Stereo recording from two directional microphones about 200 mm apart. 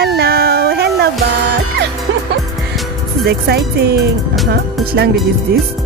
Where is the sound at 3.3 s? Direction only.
55° right (ahead or behind).